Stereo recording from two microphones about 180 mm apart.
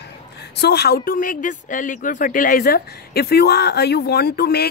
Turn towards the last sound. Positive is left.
turn(degrees=60)  # may be behind; listen again after turning